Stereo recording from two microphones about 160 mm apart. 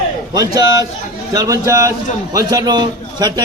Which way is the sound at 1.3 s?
20° right (ahead or behind).